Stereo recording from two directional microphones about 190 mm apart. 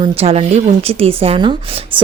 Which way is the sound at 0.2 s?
30° right (ahead or behind).